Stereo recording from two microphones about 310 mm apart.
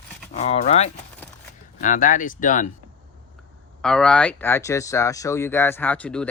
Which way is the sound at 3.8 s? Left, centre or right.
Centre.